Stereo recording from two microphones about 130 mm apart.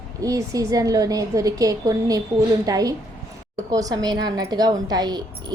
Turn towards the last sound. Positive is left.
turn(degrees=-30)  # may be behind; listen again after turning